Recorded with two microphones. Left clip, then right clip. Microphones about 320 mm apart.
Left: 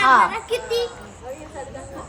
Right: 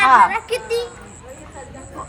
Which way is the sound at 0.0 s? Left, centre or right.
Right.